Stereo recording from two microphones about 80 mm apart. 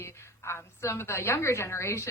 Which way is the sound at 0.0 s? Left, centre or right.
Left.